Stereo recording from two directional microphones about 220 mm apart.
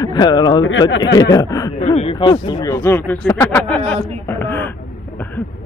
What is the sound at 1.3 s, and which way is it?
Speech, 15° left (ahead or behind).